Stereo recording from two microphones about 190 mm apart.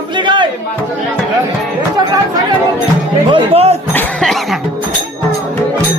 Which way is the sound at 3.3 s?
30° right (ahead or behind).